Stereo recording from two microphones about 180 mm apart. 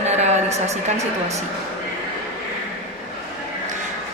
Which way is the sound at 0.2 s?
40° right (ahead or behind).